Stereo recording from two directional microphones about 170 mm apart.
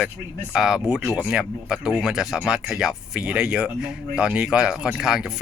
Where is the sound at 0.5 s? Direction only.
5° right (ahead or behind).